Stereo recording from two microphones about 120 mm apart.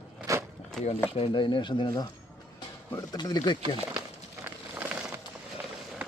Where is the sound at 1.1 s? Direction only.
50° left (ahead or behind).